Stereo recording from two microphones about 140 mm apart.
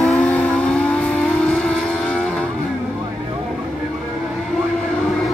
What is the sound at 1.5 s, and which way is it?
Music, 5° left (ahead or behind).